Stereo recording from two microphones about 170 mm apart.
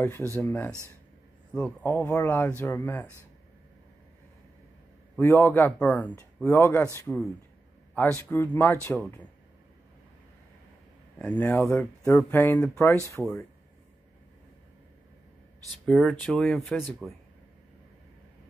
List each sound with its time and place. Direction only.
0.4 s speech: 10° left (ahead or behind)
5.1 s speech: 15° left (ahead or behind)
11.1 s speech: 10° left (ahead or behind)
15.8 s speech: centre (ahead or behind)